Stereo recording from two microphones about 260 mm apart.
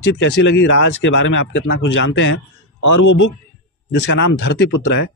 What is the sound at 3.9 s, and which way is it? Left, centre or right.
Speech, left.